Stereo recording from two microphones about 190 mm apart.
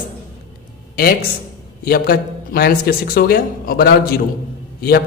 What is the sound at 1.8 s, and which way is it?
A man's voice, 50° left (ahead or behind).